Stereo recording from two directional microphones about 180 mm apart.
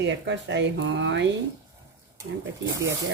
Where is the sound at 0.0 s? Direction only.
80° right.